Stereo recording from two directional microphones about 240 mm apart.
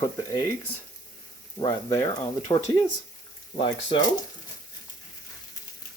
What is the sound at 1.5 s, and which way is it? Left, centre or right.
Speech, centre.